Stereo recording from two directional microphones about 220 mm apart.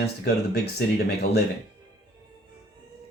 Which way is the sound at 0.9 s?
45° left (ahead or behind).